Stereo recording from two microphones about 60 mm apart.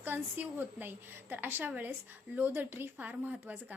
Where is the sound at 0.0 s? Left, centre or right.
Right.